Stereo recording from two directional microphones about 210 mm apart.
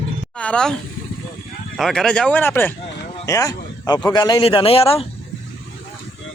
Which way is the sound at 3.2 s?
15° left (ahead or behind).